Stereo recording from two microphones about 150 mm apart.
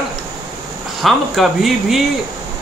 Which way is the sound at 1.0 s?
Centre (ahead or behind).